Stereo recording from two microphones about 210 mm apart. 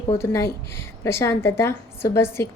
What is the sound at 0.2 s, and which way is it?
A woman's voice, 10° left (ahead or behind).